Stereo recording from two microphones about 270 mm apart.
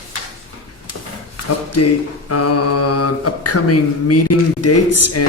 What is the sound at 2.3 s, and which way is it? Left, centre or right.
Speech, left.